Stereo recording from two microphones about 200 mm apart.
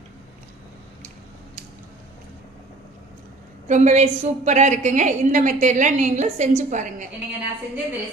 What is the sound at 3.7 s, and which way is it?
A woman's voice, 35° right (ahead or behind).